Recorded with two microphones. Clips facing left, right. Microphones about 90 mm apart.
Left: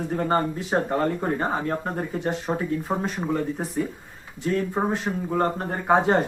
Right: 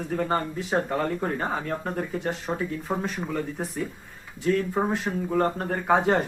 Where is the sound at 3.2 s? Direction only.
35° left (ahead or behind).